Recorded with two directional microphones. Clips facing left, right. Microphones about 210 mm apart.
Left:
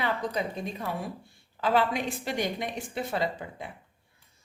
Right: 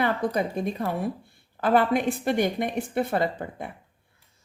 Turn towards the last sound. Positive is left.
turn(degrees=-50)  # may be behind; listen again after turning